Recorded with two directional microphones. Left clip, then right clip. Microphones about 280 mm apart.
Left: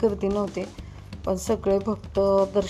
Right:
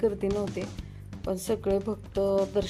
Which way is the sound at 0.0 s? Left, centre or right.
Centre.